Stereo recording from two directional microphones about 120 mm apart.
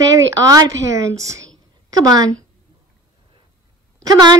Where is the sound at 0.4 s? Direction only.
30° right (ahead or behind).